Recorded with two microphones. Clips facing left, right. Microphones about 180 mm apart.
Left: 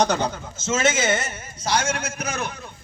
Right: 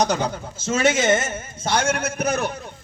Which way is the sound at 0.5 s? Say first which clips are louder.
Right 3 dB; 35° right (ahead or behind).